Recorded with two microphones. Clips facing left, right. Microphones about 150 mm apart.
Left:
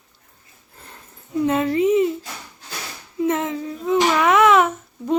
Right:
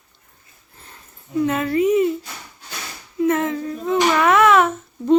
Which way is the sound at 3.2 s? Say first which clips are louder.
Right 2 dB; 20° left (ahead or behind).